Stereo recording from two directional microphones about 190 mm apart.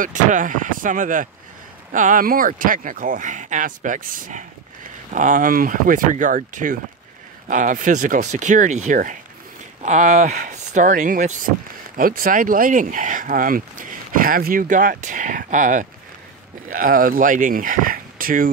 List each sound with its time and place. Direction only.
0.0 s speech: 45° right (ahead or behind)